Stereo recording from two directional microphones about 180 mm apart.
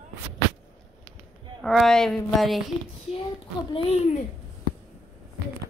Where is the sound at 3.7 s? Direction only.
35° left (ahead or behind).